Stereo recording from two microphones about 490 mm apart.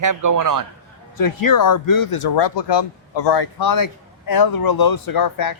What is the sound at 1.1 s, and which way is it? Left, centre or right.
Speech, left.